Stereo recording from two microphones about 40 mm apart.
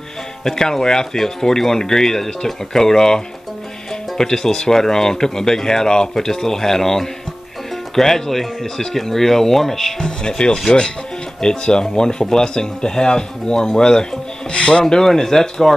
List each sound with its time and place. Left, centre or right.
0.4 s speech: centre
4.2 s speech: centre